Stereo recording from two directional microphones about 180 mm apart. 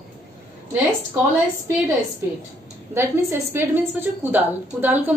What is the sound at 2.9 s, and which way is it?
A woman's voice, 15° right (ahead or behind).